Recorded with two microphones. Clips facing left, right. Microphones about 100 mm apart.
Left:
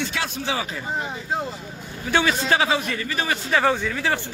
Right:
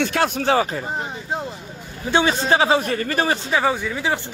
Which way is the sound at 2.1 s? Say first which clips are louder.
Right 3 dB; 30° right (ahead or behind).